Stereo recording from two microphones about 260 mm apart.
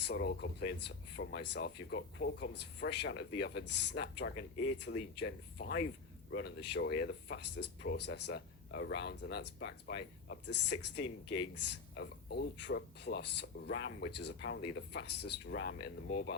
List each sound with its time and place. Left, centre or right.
0.0 s speech: left
11.9 s speech: left